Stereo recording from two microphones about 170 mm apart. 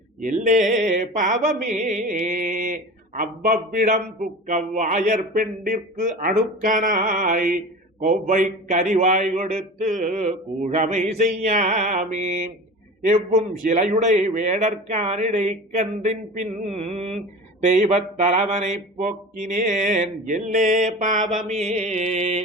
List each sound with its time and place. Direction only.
0.2 s a man's voice: 50° right (ahead or behind)
21.4 s music: 40° right (ahead or behind)